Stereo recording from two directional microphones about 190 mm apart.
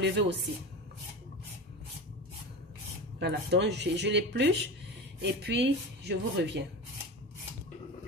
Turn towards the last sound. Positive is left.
turn(degrees=-65)  # may be behind; listen again after turning